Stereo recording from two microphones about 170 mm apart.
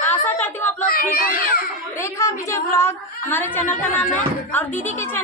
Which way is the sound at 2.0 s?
15° left (ahead or behind).